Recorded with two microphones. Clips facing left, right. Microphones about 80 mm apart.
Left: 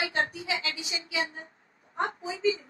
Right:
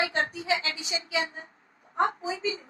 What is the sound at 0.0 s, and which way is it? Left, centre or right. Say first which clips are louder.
A woman's voice: right 1 dB; right.